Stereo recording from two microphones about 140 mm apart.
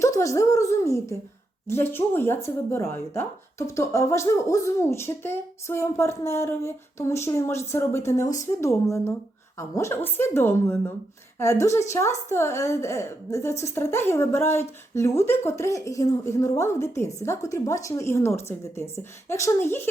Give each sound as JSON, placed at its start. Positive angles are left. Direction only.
{"t": 0.0, "sound": "a woman's voice", "side_deg": 20}